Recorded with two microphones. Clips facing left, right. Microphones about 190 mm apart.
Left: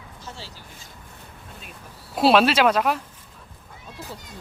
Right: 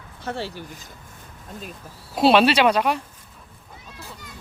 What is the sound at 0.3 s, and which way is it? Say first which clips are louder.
Speech: right 12 dB; 60° right (ahead or behind).